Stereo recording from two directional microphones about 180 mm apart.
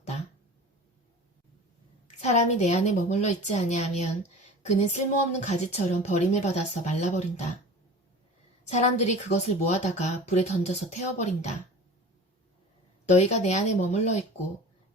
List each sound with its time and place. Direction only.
2.0 s a woman's voice: 40° left (ahead or behind)
8.7 s a woman's voice: 40° left (ahead or behind)
13.1 s a woman's voice: 40° left (ahead or behind)